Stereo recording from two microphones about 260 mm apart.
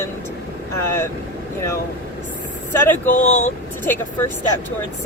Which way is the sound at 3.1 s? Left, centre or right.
Left.